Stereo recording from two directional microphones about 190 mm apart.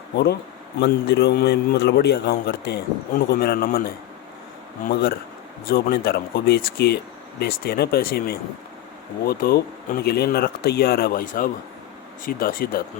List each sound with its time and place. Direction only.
0.8 s a man's voice: 65° left (ahead or behind)
4.9 s a man's voice: 60° left (ahead or behind)